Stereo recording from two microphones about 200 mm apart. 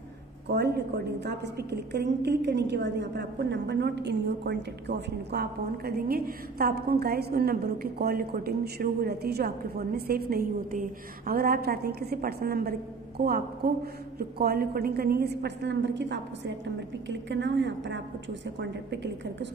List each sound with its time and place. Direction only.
0.5 s a woman's voice: 55° right (ahead or behind)